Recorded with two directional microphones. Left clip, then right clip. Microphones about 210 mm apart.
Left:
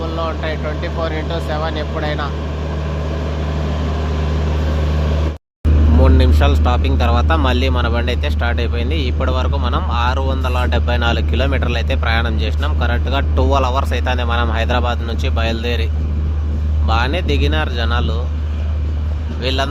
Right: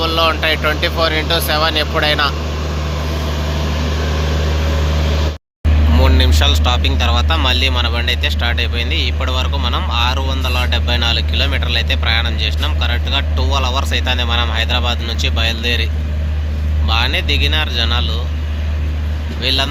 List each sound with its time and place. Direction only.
0.0 s speech: 5° left (ahead or behind)
6.0 s speech: 20° left (ahead or behind)
19.4 s speech: 30° left (ahead or behind)